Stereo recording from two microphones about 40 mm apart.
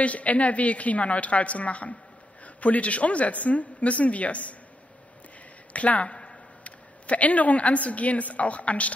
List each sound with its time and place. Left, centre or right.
0.0 s a man's voice: left
5.7 s speech: left